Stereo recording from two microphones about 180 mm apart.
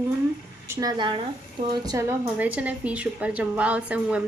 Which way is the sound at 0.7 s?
20° right (ahead or behind).